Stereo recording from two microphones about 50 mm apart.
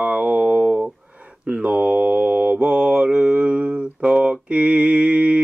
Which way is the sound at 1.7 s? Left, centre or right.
Right.